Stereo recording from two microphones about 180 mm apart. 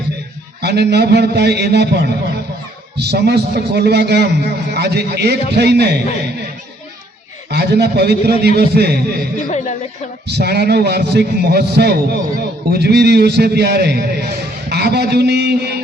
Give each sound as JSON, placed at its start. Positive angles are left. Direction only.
{"t": 0.6, "sound": "a man's voice", "side_deg": -65}
{"t": 7.5, "sound": "a man's voice", "side_deg": -65}
{"t": 9.5, "sound": "a sound", "side_deg": 40}
{"t": 10.2, "sound": "a man's voice", "side_deg": -65}